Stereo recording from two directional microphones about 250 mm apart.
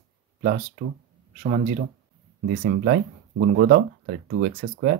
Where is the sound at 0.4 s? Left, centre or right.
Right.